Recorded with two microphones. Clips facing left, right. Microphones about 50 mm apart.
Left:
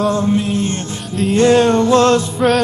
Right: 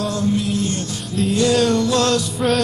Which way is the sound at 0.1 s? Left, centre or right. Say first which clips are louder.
Left 4 dB; left.